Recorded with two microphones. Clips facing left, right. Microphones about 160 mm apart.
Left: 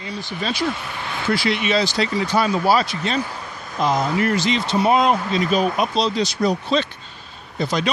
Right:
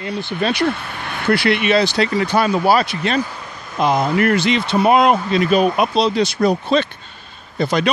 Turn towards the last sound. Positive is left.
turn(degrees=-60)  # may be behind; listen again after turning